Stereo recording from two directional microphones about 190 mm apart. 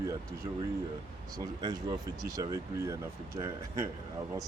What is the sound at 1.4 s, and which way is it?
Speech, 20° right (ahead or behind).